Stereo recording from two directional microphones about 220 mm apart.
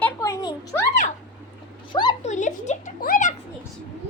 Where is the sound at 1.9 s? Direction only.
20° left (ahead or behind).